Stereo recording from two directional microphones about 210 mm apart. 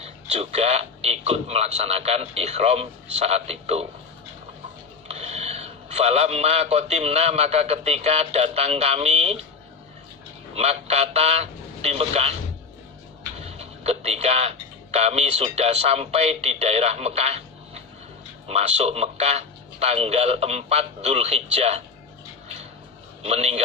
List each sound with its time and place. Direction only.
0.0 s speech: 30° right (ahead or behind)
5.0 s a man's voice: 30° right (ahead or behind)
10.5 s speech: 30° right (ahead or behind)
13.4 s a sound: 30° right (ahead or behind)
14.9 s speech: 30° right (ahead or behind)
23.2 s a man's voice: 30° right (ahead or behind)